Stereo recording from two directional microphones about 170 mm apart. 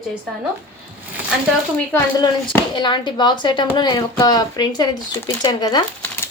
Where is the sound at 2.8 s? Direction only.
25° left (ahead or behind).